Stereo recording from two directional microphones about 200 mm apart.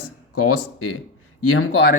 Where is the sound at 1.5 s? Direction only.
90° left.